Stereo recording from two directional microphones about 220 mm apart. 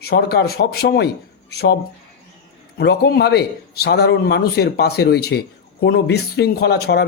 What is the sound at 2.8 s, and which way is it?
Speech, 50° left (ahead or behind).